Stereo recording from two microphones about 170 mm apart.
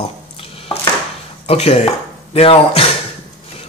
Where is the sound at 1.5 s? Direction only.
35° left (ahead or behind).